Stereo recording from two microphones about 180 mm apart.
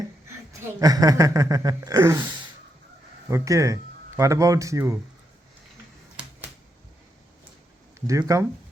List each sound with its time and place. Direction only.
0.6 s speech: 20° right (ahead or behind)
3.2 s speech: 15° right (ahead or behind)
8.3 s speech: 20° right (ahead or behind)